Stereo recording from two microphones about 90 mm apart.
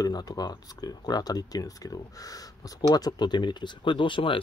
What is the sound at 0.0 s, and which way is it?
Speech, 45° left (ahead or behind).